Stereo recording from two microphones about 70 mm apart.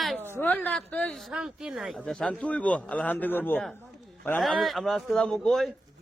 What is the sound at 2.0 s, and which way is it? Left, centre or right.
A man's voice, centre.